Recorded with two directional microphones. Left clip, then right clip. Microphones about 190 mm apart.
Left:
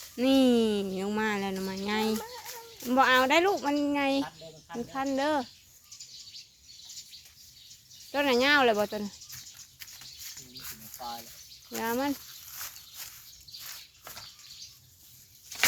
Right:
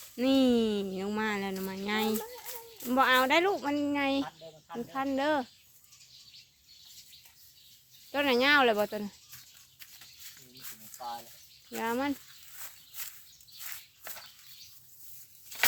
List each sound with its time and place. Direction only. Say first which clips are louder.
0.2 s a sound: left 2 dB; 10° left (ahead or behind)
2.1 s children playing: left 1 dB; 15° right (ahead or behind)
2.8 s speech: left 2 dB; 5° left (ahead or behind)
8.1 s speech: left 1 dB; centre (ahead or behind)
10.6 s a sound: left 4 dB; 20° left (ahead or behind)
11.8 s speech: left 1 dB; centre (ahead or behind)